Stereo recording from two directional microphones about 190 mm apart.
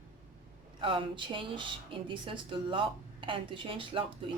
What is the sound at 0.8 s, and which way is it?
Speech, 25° right (ahead or behind).